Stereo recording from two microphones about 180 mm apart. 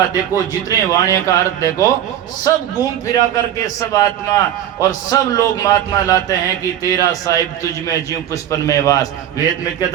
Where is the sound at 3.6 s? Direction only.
20° left (ahead or behind).